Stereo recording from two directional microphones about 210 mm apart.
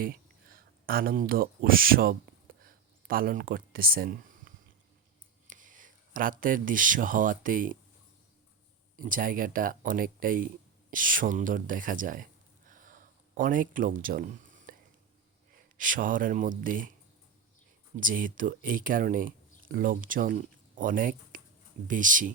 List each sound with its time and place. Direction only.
0.0 s speech: 45° right (ahead or behind)
2.6 s a sound: 45° right (ahead or behind)
5.5 s speech: 40° right (ahead or behind)
9.0 s speech: 40° right (ahead or behind)
15.8 s speech: 40° right (ahead or behind)
18.0 s speech: 40° right (ahead or behind)